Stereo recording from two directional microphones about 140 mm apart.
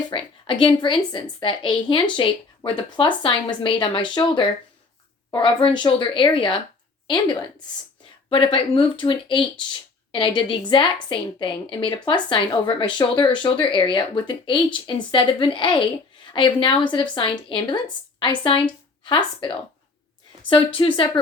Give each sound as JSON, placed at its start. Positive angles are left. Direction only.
{"t": 0.1, "sound": "speech", "side_deg": 40}
{"t": 8.3, "sound": "speech", "side_deg": 40}